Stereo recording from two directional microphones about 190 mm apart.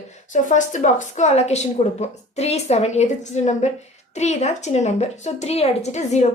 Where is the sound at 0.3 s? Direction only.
40° left (ahead or behind).